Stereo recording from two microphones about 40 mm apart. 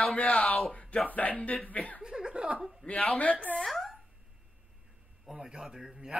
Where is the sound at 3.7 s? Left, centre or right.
Centre.